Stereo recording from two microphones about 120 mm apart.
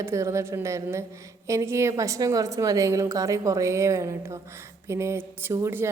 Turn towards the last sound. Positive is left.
turn(degrees=-20)  # may be behind; listen again after turning